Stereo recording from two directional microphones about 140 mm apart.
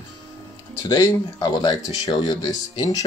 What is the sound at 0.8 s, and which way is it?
Speech, 25° left (ahead or behind).